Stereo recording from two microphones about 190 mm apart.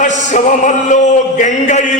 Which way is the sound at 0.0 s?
40° left (ahead or behind).